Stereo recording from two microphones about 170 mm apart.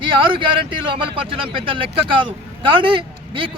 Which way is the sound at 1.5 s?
30° right (ahead or behind).